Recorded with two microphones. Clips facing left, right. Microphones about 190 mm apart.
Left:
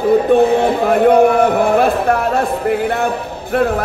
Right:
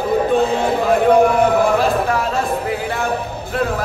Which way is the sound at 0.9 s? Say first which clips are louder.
Left 2 dB; 60° left (ahead or behind).